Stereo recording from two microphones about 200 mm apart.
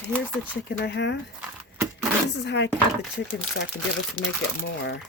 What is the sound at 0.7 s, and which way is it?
Speech, 60° left (ahead or behind).